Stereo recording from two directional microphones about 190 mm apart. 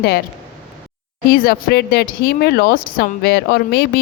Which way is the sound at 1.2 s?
50° left (ahead or behind).